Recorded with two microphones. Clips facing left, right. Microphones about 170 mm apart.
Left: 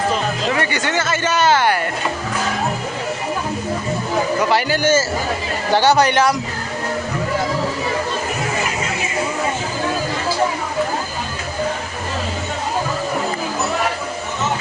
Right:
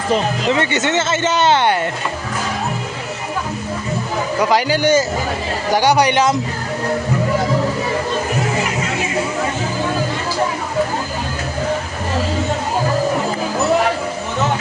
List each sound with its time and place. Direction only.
0.5 s speech: 20° right (ahead or behind)
4.4 s speech: 15° right (ahead or behind)